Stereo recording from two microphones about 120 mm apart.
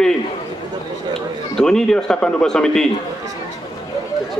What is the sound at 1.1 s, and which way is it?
A man's voice, 5° left (ahead or behind).